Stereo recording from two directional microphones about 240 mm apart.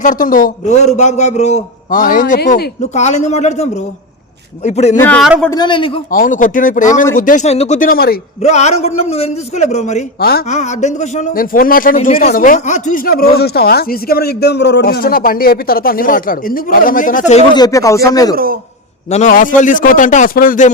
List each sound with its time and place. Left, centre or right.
0.0 s a man's voice: left
4.9 s speech: centre
5.5 s speech: centre
6.1 s a man's voice: left; by 18.3 s centre
19.1 s a man's voice: left